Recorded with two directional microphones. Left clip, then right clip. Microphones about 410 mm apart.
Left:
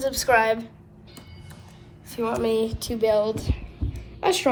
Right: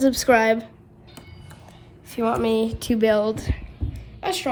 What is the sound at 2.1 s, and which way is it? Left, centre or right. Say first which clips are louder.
Speech: right 2 dB; centre.